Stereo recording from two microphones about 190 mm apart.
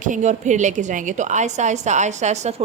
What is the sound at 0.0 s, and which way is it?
A woman's voice, 40° right (ahead or behind).